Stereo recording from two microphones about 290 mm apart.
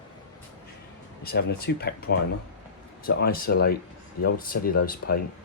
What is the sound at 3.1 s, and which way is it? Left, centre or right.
Speech, left.